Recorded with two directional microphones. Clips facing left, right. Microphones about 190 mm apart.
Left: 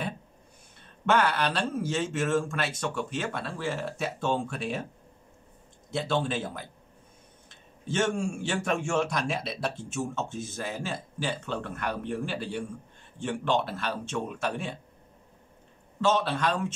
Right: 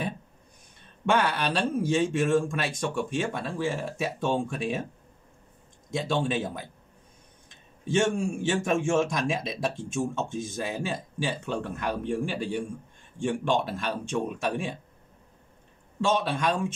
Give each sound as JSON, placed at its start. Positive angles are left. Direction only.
{"t": 1.0, "sound": "speech", "side_deg": -15}
{"t": 5.9, "sound": "speech", "side_deg": -15}
{"t": 16.0, "sound": "speech", "side_deg": -15}